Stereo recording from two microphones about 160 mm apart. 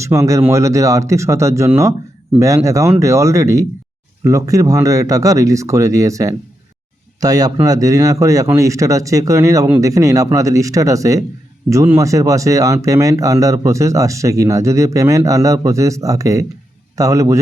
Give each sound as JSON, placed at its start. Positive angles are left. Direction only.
{"t": 0.0, "sound": "speech", "side_deg": -20}